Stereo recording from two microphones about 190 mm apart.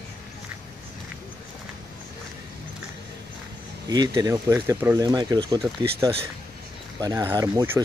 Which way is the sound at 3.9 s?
20° right (ahead or behind).